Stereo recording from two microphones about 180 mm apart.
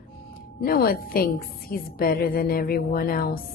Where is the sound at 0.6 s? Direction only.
55° left (ahead or behind).